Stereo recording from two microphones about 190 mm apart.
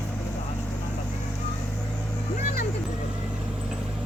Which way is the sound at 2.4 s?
35° left (ahead or behind).